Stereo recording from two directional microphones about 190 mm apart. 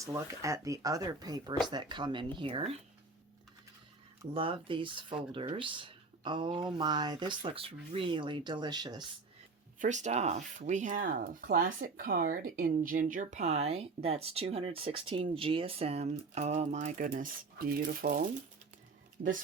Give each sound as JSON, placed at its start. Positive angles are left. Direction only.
{"t": 0.0, "sound": "speech", "side_deg": -15}
{"t": 4.4, "sound": "speech", "side_deg": -30}
{"t": 9.8, "sound": "speech", "side_deg": -40}